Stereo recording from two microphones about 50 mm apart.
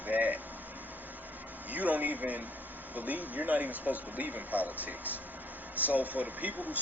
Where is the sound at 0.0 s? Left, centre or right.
Right.